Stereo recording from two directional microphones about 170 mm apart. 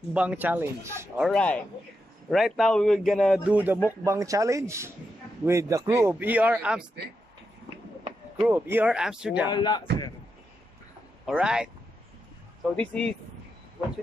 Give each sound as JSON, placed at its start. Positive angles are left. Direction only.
{"t": 0.1, "sound": "a man's voice", "side_deg": -10}
{"t": 1.2, "sound": "a man's voice", "side_deg": 5}
{"t": 8.4, "sound": "a man's voice", "side_deg": -10}
{"t": 9.5, "sound": "speech", "side_deg": 25}
{"t": 11.2, "sound": "a man's voice", "side_deg": -5}
{"t": 12.7, "sound": "a man's voice", "side_deg": 5}